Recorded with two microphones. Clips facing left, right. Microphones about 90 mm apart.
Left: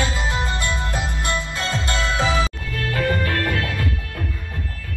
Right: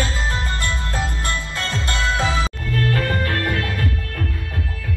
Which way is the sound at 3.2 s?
35° right (ahead or behind).